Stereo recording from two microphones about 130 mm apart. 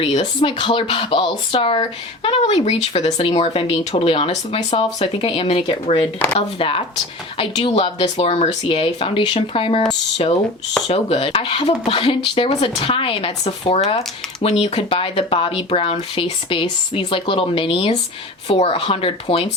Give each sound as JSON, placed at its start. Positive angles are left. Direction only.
{"t": 0.0, "sound": "speech", "side_deg": 50}
{"t": 10.8, "sound": "speech", "side_deg": 45}